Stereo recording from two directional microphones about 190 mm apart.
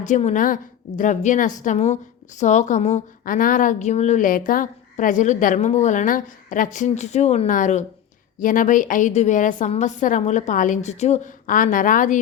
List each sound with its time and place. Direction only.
0.0 s a woman's voice: 40° left (ahead or behind)